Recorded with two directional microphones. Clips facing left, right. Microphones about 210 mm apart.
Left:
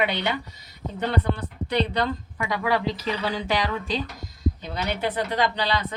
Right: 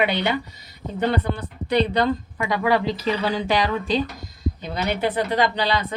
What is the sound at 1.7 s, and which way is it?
Speech, 15° right (ahead or behind).